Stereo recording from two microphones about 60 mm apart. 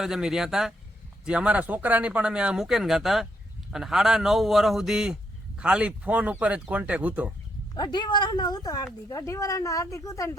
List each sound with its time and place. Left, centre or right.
0.0 s a man's voice: centre
2.6 s a man's voice: centre; by 7.3 s right
8.4 s a woman's voice: left